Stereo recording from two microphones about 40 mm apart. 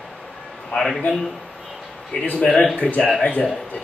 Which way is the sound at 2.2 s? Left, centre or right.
Left.